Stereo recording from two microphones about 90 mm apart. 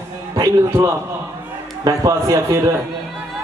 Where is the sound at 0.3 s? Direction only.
30° right (ahead or behind).